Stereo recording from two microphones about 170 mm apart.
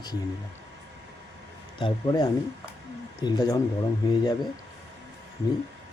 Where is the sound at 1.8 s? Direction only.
25° left (ahead or behind).